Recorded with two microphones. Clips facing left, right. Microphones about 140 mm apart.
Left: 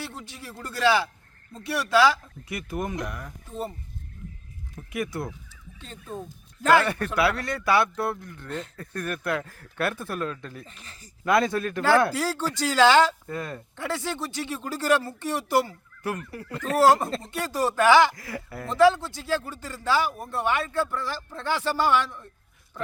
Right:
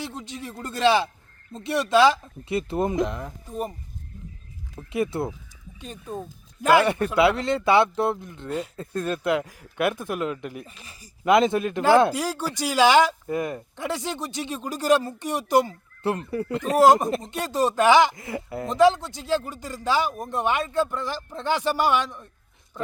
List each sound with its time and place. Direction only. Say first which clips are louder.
0.0 s speech: right 4 dB; 20° right (ahead or behind)
4.7 s speech: right 5 dB; 25° right (ahead or behind)
5.8 s speech: right 3 dB; 15° right (ahead or behind)